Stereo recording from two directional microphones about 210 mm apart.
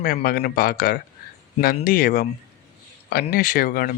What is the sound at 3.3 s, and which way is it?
Speech, 40° left (ahead or behind).